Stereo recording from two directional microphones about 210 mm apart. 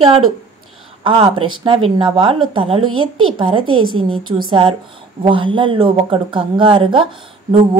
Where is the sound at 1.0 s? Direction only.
25° right (ahead or behind).